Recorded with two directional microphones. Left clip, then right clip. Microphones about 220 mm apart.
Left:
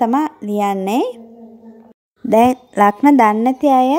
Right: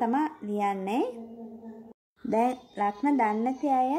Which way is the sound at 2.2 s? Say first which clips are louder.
Left 14 dB; 35° left (ahead or behind).